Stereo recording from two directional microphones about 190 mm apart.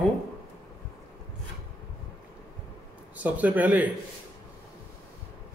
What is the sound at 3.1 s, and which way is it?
Speech, 10° right (ahead or behind).